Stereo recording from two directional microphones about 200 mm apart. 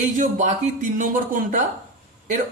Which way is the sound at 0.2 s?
35° right (ahead or behind).